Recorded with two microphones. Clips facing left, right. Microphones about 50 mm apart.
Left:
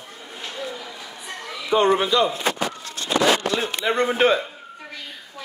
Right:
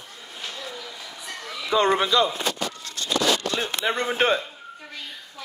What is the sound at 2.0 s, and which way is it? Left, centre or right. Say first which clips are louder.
Speech: left 1 dB; left.